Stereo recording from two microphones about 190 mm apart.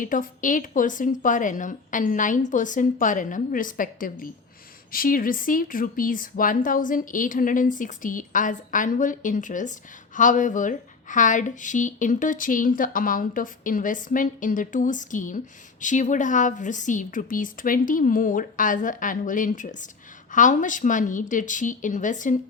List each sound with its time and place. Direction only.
0.0 s a woman's voice: 45° left (ahead or behind)